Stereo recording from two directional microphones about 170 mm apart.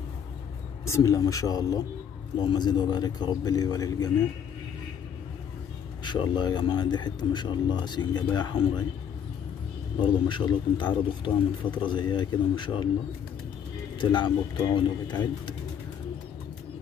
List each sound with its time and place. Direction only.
0.8 s speech: 20° left (ahead or behind)
6.0 s speech: 25° left (ahead or behind)
9.9 s speech: 30° left (ahead or behind)
13.9 s speech: 25° left (ahead or behind)